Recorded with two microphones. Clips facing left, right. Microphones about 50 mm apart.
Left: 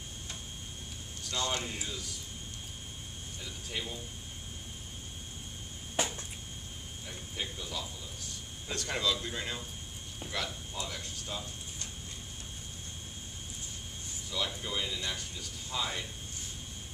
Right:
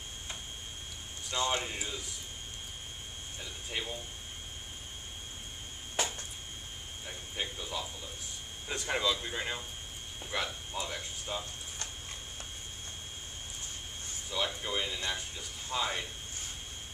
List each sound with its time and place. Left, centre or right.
1.3 s speech: right
3.7 s speech: centre
5.9 s a sound: centre
7.1 s speech: centre
14.3 s speech: right